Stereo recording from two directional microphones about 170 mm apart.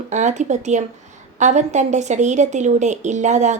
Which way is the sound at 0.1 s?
45° right (ahead or behind).